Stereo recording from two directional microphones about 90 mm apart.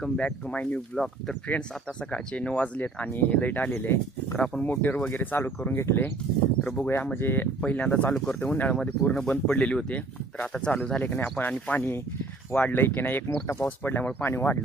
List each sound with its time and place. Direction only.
0.2 s speech: 15° left (ahead or behind)
4.4 s speech: 10° left (ahead or behind)
4.6 s speech: 20° left (ahead or behind)
11.1 s speech: 20° left (ahead or behind)
13.7 s speech: 20° left (ahead or behind)